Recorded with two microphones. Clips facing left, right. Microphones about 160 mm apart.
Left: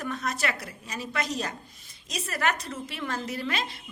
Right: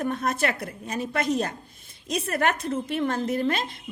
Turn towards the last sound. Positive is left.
turn(degrees=-50)  # may be behind; listen again after turning